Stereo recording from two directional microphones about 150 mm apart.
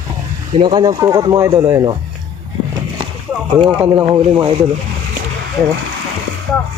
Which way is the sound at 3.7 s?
15° right (ahead or behind).